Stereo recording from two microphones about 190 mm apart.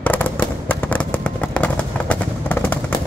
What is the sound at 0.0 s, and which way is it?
Fireworks, 10° left (ahead or behind).